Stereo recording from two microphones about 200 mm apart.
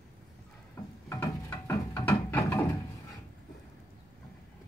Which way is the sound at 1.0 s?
15° left (ahead or behind).